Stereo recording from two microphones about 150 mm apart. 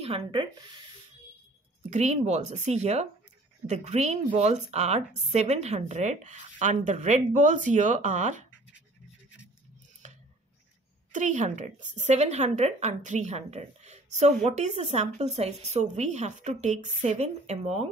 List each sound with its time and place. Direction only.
0.0 s speech: 35° right (ahead or behind)
1.8 s a woman's voice: 50° right (ahead or behind)
11.1 s a woman's voice: 55° right (ahead or behind)